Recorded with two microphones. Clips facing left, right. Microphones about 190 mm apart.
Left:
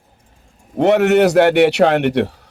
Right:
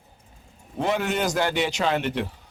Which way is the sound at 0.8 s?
70° left (ahead or behind).